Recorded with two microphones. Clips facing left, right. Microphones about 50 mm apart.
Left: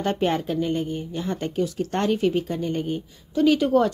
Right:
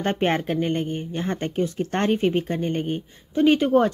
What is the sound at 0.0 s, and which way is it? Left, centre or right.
A woman's voice, right.